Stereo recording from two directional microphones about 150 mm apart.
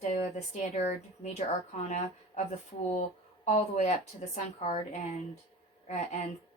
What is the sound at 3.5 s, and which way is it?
A woman's voice, 50° left (ahead or behind).